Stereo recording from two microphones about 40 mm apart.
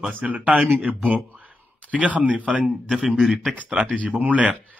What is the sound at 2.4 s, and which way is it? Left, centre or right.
Speech, right.